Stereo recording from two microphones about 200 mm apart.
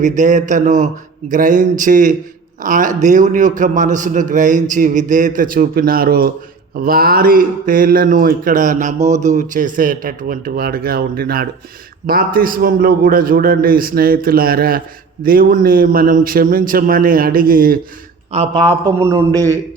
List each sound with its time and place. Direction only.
0.0 s a man's voice: 40° right (ahead or behind)
18.3 s a man's voice: 30° right (ahead or behind)
18.7 s a man's voice: 15° right (ahead or behind)